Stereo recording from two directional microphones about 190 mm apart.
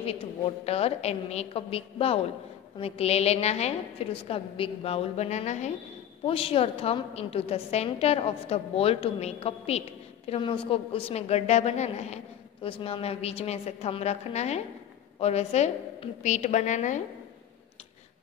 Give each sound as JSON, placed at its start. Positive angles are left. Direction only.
{"t": 0.0, "sound": "a woman's voice", "side_deg": 30}